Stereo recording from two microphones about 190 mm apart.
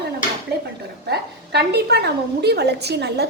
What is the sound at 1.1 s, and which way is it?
A woman's voice, 60° right (ahead or behind).